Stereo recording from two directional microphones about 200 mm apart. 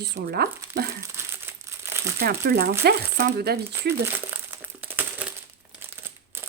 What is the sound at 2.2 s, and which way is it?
Speech, 50° right (ahead or behind).